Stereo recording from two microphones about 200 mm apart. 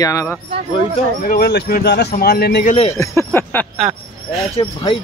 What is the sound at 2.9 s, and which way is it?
Speech, 15° left (ahead or behind).